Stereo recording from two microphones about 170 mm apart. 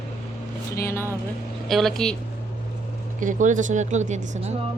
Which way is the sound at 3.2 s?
50° right (ahead or behind).